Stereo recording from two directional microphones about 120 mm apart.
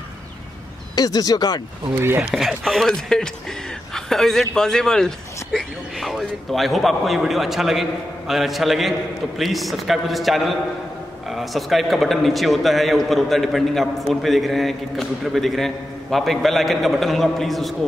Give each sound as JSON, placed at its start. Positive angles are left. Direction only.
{"t": 0.9, "sound": "speech", "side_deg": 30}
{"t": 2.0, "sound": "speech", "side_deg": -20}
{"t": 2.3, "sound": "a man's voice", "side_deg": 0}